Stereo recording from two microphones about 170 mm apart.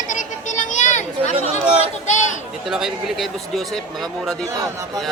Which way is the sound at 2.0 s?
45° left (ahead or behind).